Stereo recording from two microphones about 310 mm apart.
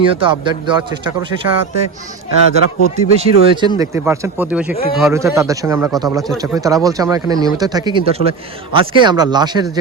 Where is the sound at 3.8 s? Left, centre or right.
Centre.